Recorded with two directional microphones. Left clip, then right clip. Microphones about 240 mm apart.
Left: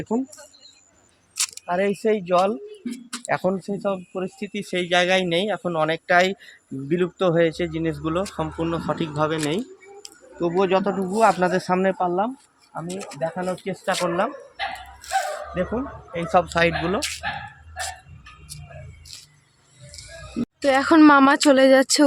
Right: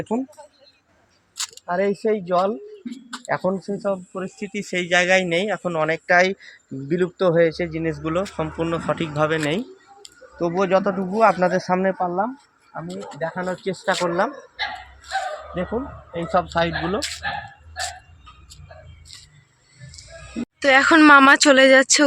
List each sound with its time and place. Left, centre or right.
0.0 s speech: centre
1.4 s speech: centre
8.6 s speech: right
10.0 s bird: right
11.1 s speech: centre
16.1 s speech: centre
20.7 s speech: centre